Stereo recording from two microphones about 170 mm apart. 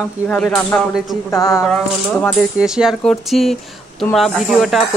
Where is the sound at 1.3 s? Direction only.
15° left (ahead or behind).